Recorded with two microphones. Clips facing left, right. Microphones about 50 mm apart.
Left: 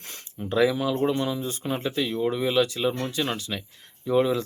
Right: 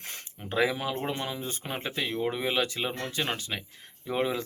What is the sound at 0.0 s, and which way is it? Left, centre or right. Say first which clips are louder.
Speech: left 5 dB; right.